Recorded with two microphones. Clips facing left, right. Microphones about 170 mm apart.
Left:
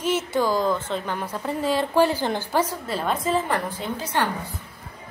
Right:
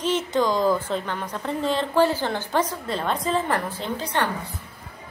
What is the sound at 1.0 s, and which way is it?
A woman's voice, 10° left (ahead or behind).